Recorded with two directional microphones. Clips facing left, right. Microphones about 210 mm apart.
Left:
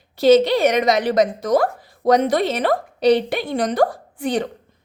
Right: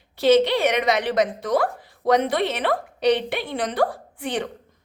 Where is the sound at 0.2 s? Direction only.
40° left (ahead or behind).